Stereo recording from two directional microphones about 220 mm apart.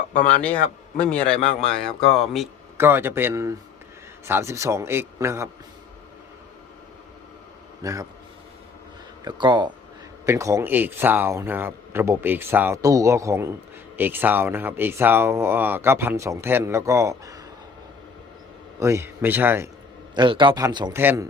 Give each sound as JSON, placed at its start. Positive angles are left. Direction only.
{"t": 0.9, "sound": "speech", "side_deg": 5}
{"t": 2.7, "sound": "speech", "side_deg": -10}
{"t": 7.8, "sound": "a man's voice", "side_deg": -15}
{"t": 9.2, "sound": "speech", "side_deg": -20}
{"t": 18.8, "sound": "speech", "side_deg": -10}
{"t": 20.1, "sound": "speech", "side_deg": -20}